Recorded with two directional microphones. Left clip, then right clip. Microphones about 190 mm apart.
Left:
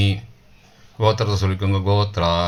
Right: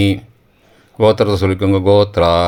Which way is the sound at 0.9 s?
45° right (ahead or behind).